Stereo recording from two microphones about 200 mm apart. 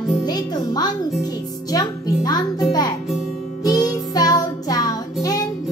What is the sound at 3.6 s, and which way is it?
Music, 20° left (ahead or behind).